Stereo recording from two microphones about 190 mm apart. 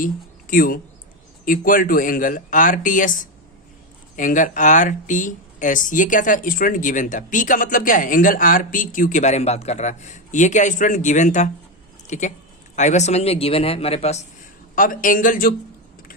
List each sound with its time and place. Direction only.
0.0 s a man's voice: 45° left (ahead or behind)
14.8 s speech: 45° left (ahead or behind)